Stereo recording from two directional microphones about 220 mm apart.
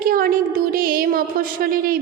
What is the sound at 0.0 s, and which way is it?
Speech, 40° right (ahead or behind).